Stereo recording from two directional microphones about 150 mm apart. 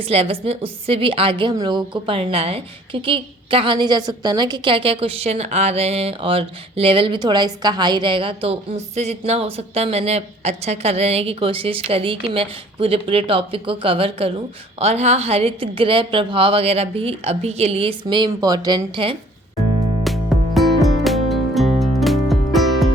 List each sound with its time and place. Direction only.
0.0 s a woman's voice: 40° right (ahead or behind)
18.0 s speech: 30° right (ahead or behind)
20.1 s music: centre (ahead or behind)